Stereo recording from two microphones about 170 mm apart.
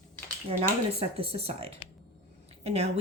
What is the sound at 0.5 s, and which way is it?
Speech, 35° right (ahead or behind).